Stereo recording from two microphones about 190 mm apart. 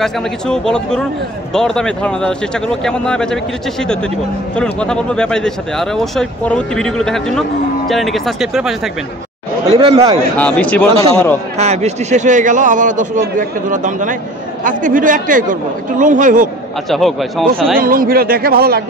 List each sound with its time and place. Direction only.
0.0 s speech: 5° left (ahead or behind)
4.6 s speech: 5° left (ahead or behind)
9.7 s speech: 30° right (ahead or behind)
10.3 s speech: 5° left (ahead or behind)
10.9 s a man's voice: 30° right (ahead or behind)
16.9 s speech: centre (ahead or behind)
17.7 s speech: 50° right (ahead or behind)